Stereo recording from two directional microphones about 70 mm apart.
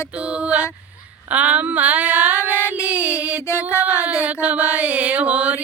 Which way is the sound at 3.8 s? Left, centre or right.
Right.